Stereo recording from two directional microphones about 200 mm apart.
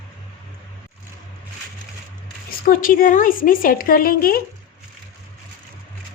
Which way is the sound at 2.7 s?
45° left (ahead or behind).